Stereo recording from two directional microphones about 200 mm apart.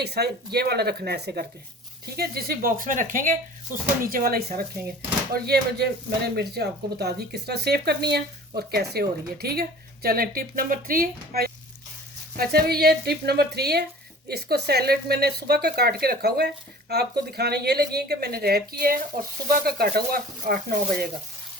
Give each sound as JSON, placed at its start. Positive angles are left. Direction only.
{"t": 0.0, "sound": "speech", "side_deg": -55}